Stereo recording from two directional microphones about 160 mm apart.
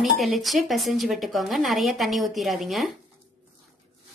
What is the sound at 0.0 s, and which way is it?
A woman's voice, centre (ahead or behind).